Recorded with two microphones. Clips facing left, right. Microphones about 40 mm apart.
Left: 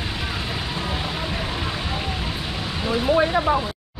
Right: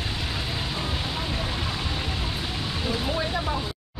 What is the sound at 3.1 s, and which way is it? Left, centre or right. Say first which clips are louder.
Speech: left 9 dB; left.